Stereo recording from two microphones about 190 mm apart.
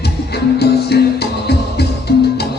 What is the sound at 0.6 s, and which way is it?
Music, 60° left (ahead or behind).